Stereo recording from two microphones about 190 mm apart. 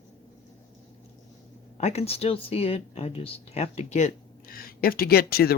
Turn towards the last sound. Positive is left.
turn(degrees=55)  # may be behind; listen again after turning